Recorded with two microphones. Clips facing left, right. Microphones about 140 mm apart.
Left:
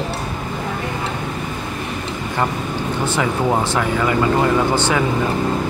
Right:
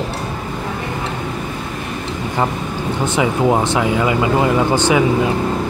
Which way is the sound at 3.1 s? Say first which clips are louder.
Right 4 dB; 15° right (ahead or behind).